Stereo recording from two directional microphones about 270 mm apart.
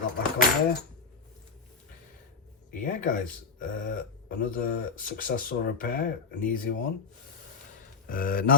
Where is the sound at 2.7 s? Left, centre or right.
Left.